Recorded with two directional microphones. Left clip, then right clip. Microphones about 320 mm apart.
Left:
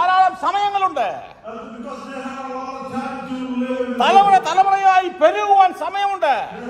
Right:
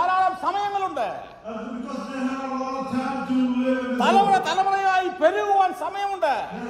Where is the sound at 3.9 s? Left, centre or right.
Left.